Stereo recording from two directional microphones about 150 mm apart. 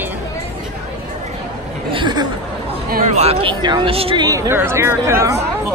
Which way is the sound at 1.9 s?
30° right (ahead or behind).